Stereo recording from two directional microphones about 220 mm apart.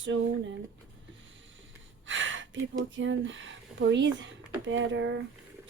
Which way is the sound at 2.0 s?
60° right (ahead or behind).